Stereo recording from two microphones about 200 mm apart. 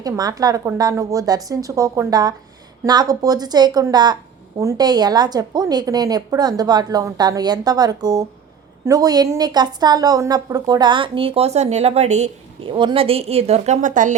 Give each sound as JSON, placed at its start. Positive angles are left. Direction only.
{"t": 0.0, "sound": "a woman's voice", "side_deg": -20}